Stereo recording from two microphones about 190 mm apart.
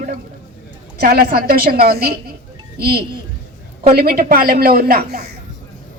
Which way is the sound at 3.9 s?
55° right (ahead or behind).